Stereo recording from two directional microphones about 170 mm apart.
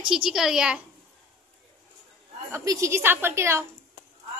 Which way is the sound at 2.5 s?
20° right (ahead or behind).